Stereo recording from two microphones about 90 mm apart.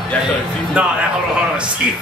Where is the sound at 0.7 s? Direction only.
10° right (ahead or behind).